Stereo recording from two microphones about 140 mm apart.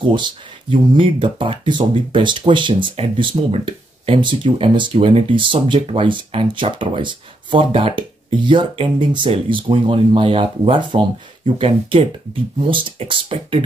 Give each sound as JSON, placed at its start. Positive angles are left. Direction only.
{"t": 0.0, "sound": "speech", "side_deg": -35}